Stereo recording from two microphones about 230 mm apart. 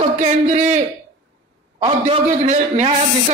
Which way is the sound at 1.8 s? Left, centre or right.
Right.